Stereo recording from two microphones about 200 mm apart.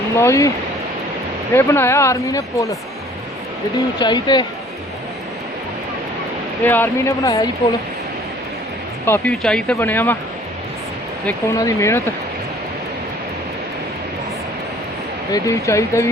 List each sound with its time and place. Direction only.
0.2 s speech: 15° left (ahead or behind)
1.5 s speech: 10° left (ahead or behind)
4.0 s speech: 20° left (ahead or behind)
6.6 s speech: 10° left (ahead or behind)
9.0 s speech: 10° left (ahead or behind)
11.3 s speech: 15° left (ahead or behind)
15.3 s speech: 15° left (ahead or behind)